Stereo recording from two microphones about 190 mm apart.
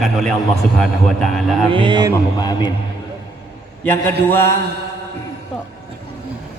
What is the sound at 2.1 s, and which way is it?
Speech, 20° left (ahead or behind).